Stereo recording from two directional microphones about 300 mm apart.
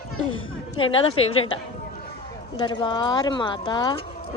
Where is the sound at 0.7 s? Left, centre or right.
Centre.